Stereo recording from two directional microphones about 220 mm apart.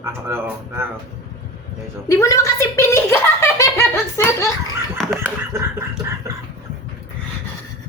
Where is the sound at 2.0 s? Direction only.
15° left (ahead or behind).